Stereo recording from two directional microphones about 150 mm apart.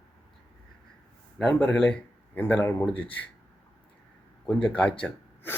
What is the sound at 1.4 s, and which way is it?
Speech, 5° left (ahead or behind).